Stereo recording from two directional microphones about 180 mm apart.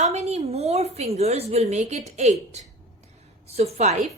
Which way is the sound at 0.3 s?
35° right (ahead or behind).